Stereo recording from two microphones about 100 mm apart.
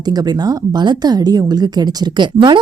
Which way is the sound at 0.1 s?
40° right (ahead or behind).